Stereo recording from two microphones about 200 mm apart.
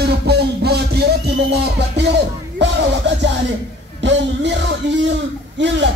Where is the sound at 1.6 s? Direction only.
55° right (ahead or behind).